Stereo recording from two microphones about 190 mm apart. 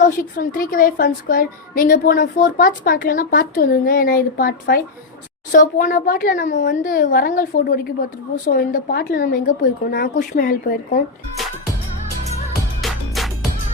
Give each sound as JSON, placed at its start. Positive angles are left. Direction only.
{"t": 0.0, "sound": "a woman's voice", "side_deg": 50}
{"t": 12.8, "sound": "music", "side_deg": 0}